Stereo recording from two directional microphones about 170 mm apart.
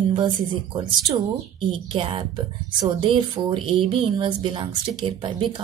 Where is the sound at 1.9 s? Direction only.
30° right (ahead or behind).